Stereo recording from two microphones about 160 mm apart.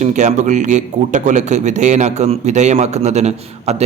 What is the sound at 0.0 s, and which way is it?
A man's voice, 50° right (ahead or behind).